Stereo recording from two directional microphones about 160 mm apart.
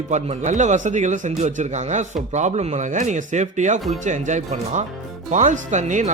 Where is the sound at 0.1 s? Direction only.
50° right (ahead or behind).